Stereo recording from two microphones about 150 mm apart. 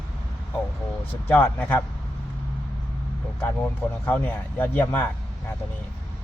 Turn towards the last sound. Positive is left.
turn(degrees=15)  # may be behind; listen again after turning